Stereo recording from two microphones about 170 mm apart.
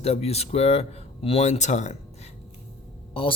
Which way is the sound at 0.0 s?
35° left (ahead or behind).